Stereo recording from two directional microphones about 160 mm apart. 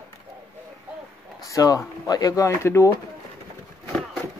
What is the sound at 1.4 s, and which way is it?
Speech, 20° left (ahead or behind).